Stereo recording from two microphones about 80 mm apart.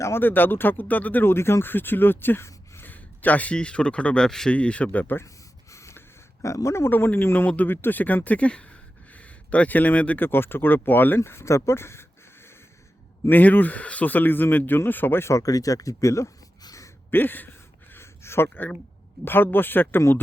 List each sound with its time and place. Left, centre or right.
0.0 s speech: left
5.7 s snort: left
6.4 s speech: left
16.6 s a sound: left
17.1 s speech: left
17.9 s a sound: left
19.2 s speech: left